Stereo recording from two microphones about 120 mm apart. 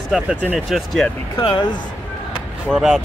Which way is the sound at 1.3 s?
40° left (ahead or behind).